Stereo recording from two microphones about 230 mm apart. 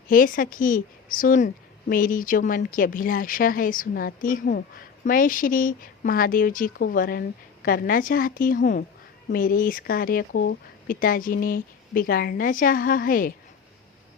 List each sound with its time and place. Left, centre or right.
0.1 s speech: left